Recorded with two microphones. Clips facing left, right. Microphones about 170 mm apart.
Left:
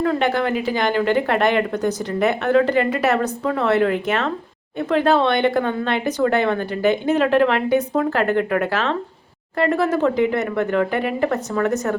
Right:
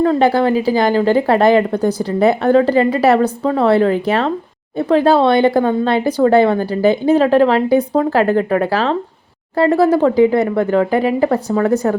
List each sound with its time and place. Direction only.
0.0 s speech: 35° right (ahead or behind)